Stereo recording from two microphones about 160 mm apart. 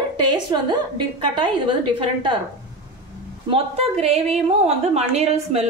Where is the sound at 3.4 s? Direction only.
40° right (ahead or behind).